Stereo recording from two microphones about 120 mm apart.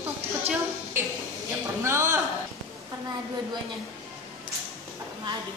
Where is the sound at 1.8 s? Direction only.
25° right (ahead or behind).